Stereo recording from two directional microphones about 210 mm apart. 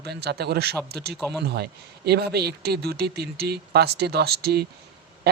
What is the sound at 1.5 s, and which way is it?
Speech, 50° right (ahead or behind).